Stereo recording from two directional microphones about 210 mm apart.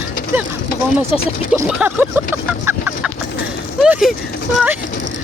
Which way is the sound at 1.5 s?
10° right (ahead or behind).